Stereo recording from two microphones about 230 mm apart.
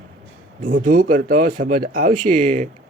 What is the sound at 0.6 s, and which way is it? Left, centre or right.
Speech, right.